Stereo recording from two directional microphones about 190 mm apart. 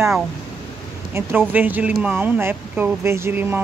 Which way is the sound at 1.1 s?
15° right (ahead or behind).